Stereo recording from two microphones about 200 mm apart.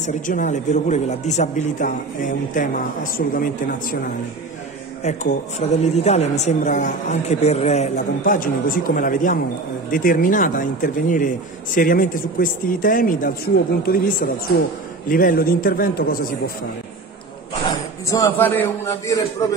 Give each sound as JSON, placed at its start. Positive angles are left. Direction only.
{"t": 0.0, "sound": "speech", "side_deg": 40}
{"t": 5.0, "sound": "speech", "side_deg": 35}
{"t": 15.0, "sound": "speech", "side_deg": 45}
{"t": 18.1, "sound": "a man's voice", "side_deg": 15}